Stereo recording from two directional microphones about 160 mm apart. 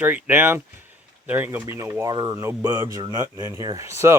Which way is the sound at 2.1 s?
30° right (ahead or behind).